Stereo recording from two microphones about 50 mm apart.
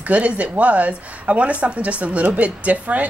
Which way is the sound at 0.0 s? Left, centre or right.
Right.